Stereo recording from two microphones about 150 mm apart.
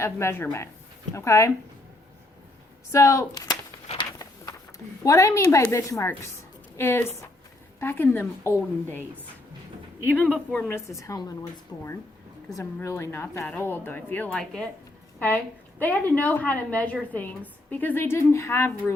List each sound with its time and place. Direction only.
0.0 s a woman's voice: 15° left (ahead or behind)
2.9 s a woman's voice: 20° left (ahead or behind)
3.9 s a sound: 25° left (ahead or behind)
5.0 s a woman's voice: 20° left (ahead or behind)
10.2 s a woman's voice: 10° left (ahead or behind)
11.7 s speech: 5° left (ahead or behind)
12.5 s a woman's voice: 20° left (ahead or behind)
15.8 s a woman's voice: 10° left (ahead or behind)